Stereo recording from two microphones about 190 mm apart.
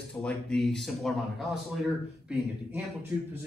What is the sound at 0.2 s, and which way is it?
A man's voice, 5° left (ahead or behind).